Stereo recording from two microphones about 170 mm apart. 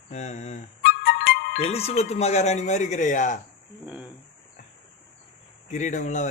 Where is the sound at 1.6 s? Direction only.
35° left (ahead or behind).